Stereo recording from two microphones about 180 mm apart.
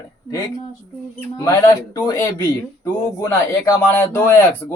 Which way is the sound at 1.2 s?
15° left (ahead or behind).